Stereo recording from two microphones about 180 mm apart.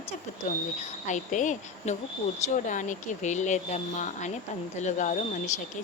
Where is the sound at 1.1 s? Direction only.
45° left (ahead or behind).